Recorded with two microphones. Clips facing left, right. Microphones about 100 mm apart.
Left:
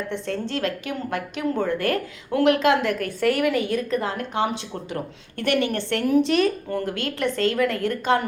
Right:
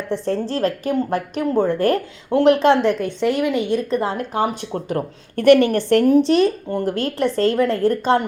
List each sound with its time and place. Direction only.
0.1 s a woman's voice: 35° right (ahead or behind)
4.0 s a woman's voice: 35° right (ahead or behind)
4.5 s a woman's voice: 45° right (ahead or behind)